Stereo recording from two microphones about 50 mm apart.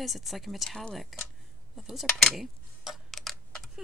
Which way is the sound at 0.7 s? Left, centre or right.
Centre.